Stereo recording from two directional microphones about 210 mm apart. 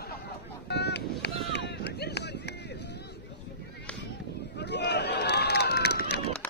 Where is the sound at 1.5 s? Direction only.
55° left (ahead or behind).